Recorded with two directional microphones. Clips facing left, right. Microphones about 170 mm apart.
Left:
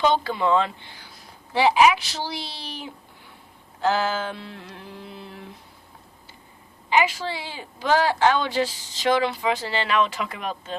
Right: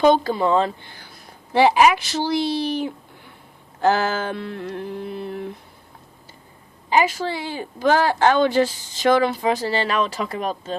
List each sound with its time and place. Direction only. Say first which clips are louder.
0.0 s speech: right 5 dB; 45° right (ahead or behind)
6.9 s speech: right 3 dB; 45° right (ahead or behind)